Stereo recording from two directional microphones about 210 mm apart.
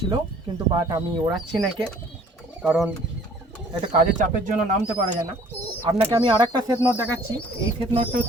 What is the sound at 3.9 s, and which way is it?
Speech, 35° right (ahead or behind).